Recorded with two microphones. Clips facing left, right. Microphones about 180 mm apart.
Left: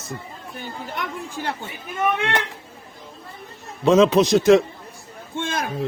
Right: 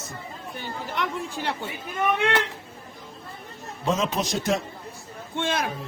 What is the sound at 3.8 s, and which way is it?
Speech, 85° left.